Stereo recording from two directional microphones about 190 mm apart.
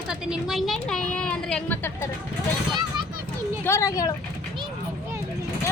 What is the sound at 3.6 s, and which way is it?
Speech, 15° left (ahead or behind).